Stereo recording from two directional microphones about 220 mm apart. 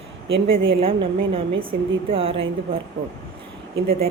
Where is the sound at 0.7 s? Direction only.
25° right (ahead or behind).